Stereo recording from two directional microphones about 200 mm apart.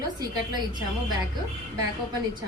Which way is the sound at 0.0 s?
20° right (ahead or behind).